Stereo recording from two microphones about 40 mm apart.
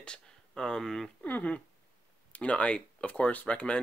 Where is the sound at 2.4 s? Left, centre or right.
Left.